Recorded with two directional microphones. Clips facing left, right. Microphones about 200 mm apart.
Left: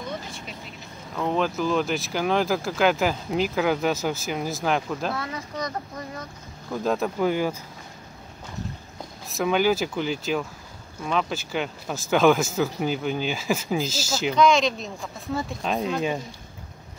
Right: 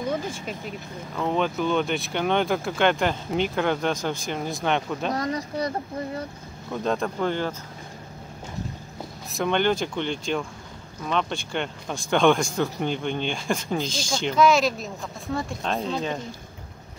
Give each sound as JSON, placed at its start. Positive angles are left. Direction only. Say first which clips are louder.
{"t": 1.1, "sound": "speech", "louder": "even", "side_deg": 0}
{"t": 5.1, "sound": "speech", "louder": "right 5 dB", "side_deg": -40}
{"t": 6.7, "sound": "speech", "louder": "left 1 dB", "side_deg": 5}
{"t": 9.3, "sound": "speech", "louder": "left 1 dB", "side_deg": 5}